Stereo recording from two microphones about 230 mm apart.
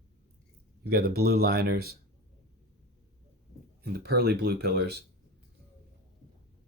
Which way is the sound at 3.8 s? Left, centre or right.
Right.